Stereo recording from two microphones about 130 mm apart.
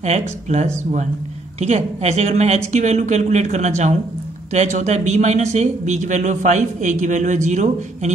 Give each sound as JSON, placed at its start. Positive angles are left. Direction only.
{"t": 0.5, "sound": "speech", "side_deg": -60}